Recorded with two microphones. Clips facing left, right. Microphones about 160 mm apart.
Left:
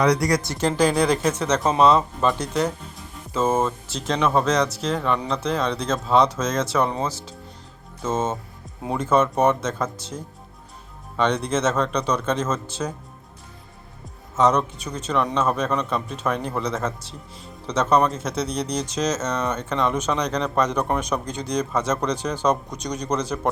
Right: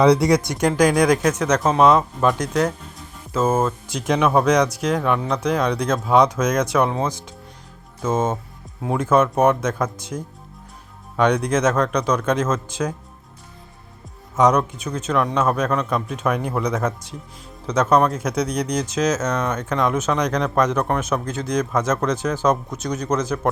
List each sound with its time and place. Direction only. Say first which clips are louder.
0.0 s speech: right 5 dB; 25° right (ahead or behind)
0.8 s speech: right 3 dB; 10° right (ahead or behind); by 2.7 s 5° left (ahead or behind)
3.3 s speech: right 2 dB; 5° right (ahead or behind)
6.8 s speech: right 3 dB; 5° right (ahead or behind)
11.3 s speech: right 3 dB; 5° right (ahead or behind)
14.3 s speech: right 2 dB; 15° right (ahead or behind)